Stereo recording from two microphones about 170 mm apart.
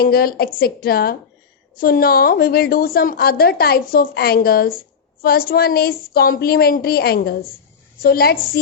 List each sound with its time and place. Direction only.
0.0 s a woman's voice: 60° left (ahead or behind)